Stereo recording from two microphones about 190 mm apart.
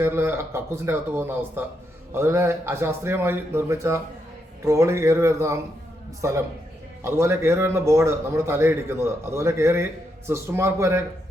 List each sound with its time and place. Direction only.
0.0 s a man's voice: 10° right (ahead or behind)